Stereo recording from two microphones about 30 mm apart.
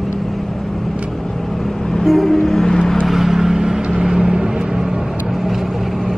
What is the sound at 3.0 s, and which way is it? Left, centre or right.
Vehicle, centre.